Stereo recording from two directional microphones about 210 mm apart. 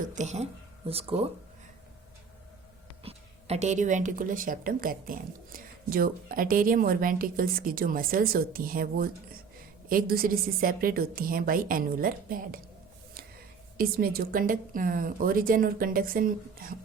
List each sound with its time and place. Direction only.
0.0 s a woman's voice: 35° right (ahead or behind)
3.0 s speech: 30° right (ahead or behind)
13.7 s speech: 45° right (ahead or behind)